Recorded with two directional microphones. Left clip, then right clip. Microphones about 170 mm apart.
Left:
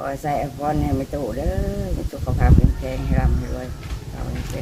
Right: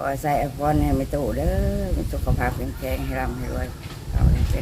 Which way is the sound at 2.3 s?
15° right (ahead or behind).